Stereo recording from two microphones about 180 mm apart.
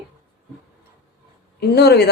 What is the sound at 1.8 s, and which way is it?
Speech, 65° left (ahead or behind).